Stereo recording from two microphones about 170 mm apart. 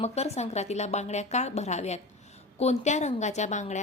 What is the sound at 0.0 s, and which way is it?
A woman's voice, 40° left (ahead or behind).